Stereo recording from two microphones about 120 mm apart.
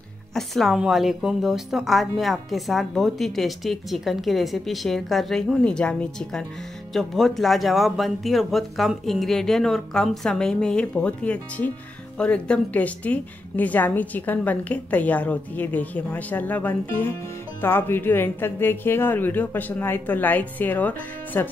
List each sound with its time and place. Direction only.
0.3 s a woman's voice: centre (ahead or behind)